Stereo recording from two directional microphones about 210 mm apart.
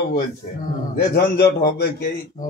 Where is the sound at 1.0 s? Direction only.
50° left (ahead or behind).